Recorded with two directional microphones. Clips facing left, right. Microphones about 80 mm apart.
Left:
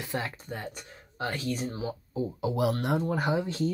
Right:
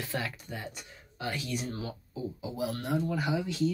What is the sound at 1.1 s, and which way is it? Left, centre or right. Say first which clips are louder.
Speech: left 3 dB; left.